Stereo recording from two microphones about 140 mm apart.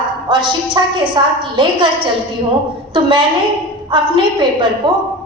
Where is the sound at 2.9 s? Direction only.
40° right (ahead or behind).